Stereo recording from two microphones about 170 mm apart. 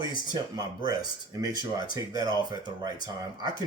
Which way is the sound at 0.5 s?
25° right (ahead or behind).